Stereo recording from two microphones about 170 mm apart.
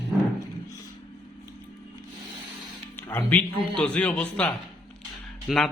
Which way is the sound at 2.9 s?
10° left (ahead or behind).